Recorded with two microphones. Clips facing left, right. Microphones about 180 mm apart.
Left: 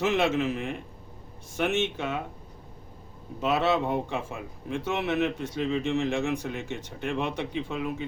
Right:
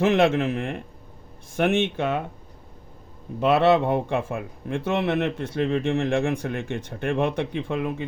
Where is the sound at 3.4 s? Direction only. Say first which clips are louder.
Right 7 dB; 60° right (ahead or behind).